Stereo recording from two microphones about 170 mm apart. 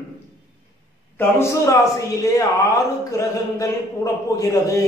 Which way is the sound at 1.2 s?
15° left (ahead or behind).